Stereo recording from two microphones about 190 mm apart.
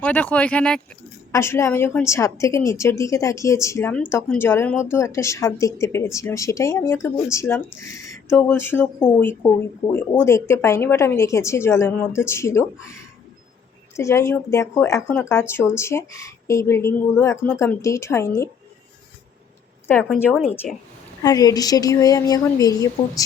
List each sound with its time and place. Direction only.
0.0 s speech: 5° left (ahead or behind)
13.9 s speech: 15° left (ahead or behind)
19.9 s speech: 10° left (ahead or behind)
21.2 s a woman's voice: 20° left (ahead or behind)